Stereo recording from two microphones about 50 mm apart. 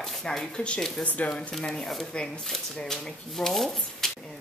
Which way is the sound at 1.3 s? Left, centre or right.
Centre.